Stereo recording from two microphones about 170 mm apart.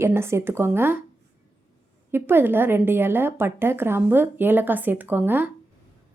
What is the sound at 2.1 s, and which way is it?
A woman's voice, 10° right (ahead or behind).